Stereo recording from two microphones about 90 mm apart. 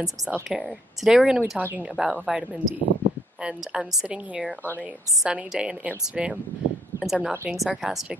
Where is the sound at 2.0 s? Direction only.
5° right (ahead or behind).